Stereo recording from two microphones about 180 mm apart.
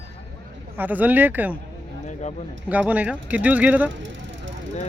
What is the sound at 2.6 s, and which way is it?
A man's voice, 10° right (ahead or behind).